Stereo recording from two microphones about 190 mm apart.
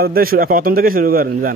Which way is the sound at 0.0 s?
50° right (ahead or behind).